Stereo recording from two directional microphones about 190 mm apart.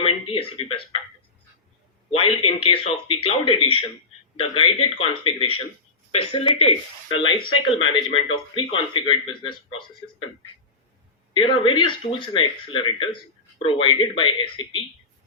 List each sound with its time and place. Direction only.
0.0 s speech: 30° left (ahead or behind)
2.0 s a man's voice: 30° left (ahead or behind)
11.3 s a man's voice: 25° left (ahead or behind)